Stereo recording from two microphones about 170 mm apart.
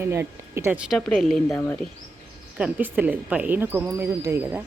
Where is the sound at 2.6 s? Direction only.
5° right (ahead or behind).